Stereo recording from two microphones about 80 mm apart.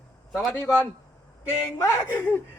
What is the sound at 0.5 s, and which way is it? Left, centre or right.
Speech, left.